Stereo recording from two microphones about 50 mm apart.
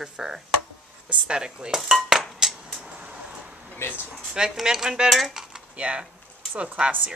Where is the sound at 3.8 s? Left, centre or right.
Left.